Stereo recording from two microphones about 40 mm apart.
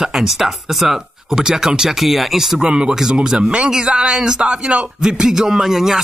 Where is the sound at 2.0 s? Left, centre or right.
Centre.